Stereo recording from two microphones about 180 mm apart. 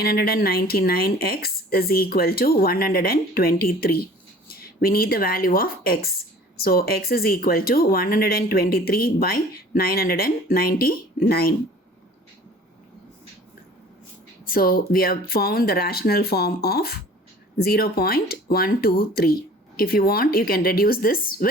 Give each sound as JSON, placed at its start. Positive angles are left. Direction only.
{"t": 0.0, "sound": "speech", "side_deg": 60}
{"t": 14.4, "sound": "speech", "side_deg": 55}